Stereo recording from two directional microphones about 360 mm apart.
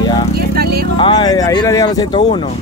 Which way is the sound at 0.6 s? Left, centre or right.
Right.